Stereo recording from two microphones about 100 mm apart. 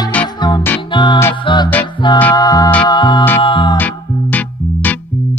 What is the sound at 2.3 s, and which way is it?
Music, 40° left (ahead or behind).